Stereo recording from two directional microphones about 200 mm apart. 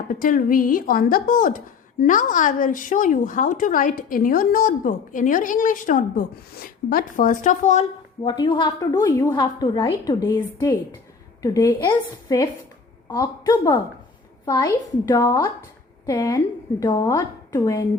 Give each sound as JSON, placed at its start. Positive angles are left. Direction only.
{"t": 0.1, "sound": "speech", "side_deg": 45}
{"t": 8.2, "sound": "a woman's voice", "side_deg": 25}